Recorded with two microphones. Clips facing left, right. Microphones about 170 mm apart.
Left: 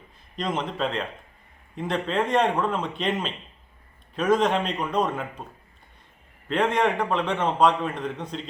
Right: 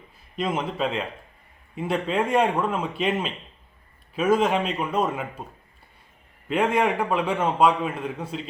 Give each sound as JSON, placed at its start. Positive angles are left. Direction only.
{"t": 0.3, "sound": "a man's voice", "side_deg": -5}
{"t": 6.5, "sound": "a man's voice", "side_deg": -10}